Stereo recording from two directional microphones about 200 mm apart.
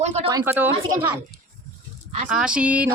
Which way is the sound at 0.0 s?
35° right (ahead or behind).